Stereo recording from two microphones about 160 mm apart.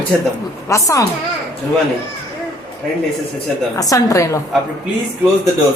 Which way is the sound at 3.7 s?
20° left (ahead or behind).